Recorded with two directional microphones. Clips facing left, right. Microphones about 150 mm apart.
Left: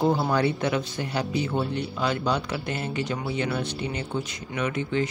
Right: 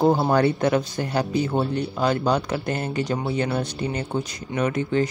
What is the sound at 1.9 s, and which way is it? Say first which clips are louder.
Speech: right 5 dB; 45° right (ahead or behind).